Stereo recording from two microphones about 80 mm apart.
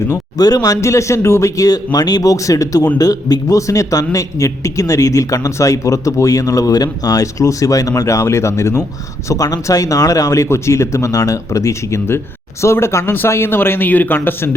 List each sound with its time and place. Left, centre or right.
0.1 s a man's voice: left
0.8 s a man's voice: left